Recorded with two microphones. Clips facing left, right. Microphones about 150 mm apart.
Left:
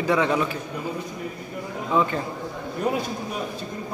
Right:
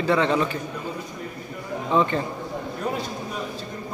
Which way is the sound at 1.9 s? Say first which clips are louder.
Right 1 dB; 5° left (ahead or behind).